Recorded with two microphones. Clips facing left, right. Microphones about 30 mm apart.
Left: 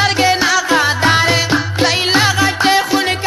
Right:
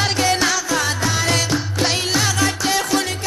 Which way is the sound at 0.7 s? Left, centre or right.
Left.